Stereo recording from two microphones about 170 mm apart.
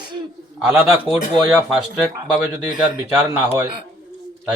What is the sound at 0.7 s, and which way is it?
Speech, 10° right (ahead or behind).